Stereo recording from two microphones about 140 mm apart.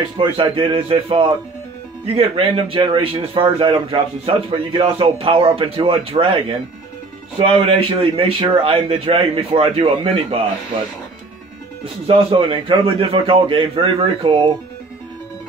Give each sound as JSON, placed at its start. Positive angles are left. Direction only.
{"t": 0.2, "sound": "speech", "side_deg": -35}
{"t": 11.8, "sound": "speech", "side_deg": -40}